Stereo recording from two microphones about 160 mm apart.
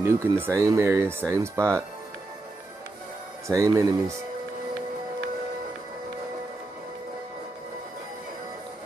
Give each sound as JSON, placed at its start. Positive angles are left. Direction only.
{"t": 0.0, "sound": "speech", "side_deg": -15}
{"t": 3.4, "sound": "speech", "side_deg": -20}